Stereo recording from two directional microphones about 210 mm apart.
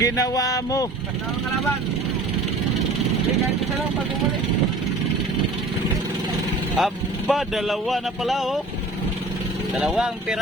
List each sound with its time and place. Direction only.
0.0 s speech: 15° left (ahead or behind)
6.7 s speech: centre (ahead or behind)
9.7 s speech: 5° right (ahead or behind)